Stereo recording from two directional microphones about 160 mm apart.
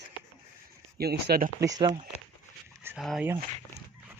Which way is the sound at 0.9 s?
75° right (ahead or behind).